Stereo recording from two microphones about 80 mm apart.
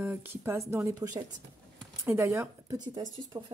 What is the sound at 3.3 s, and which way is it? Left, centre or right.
Speech, right.